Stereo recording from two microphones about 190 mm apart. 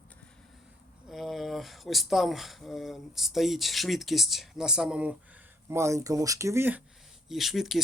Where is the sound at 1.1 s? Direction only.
Centre (ahead or behind).